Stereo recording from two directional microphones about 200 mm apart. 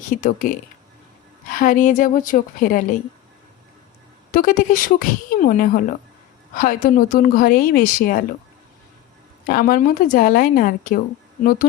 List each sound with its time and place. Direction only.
0.2 s a woman's voice: 40° left (ahead or behind)
4.3 s a woman's voice: 45° left (ahead or behind)
9.4 s a woman's voice: 45° left (ahead or behind)